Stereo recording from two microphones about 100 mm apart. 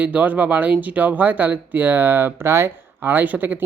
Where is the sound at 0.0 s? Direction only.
15° right (ahead or behind).